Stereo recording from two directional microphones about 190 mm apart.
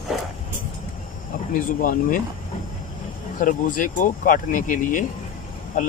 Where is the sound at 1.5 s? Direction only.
45° left (ahead or behind).